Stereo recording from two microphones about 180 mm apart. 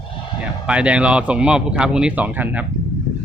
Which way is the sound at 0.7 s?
5° right (ahead or behind).